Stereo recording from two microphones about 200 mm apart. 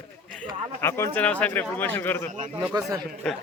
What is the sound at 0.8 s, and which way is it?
Speech, 15° left (ahead or behind).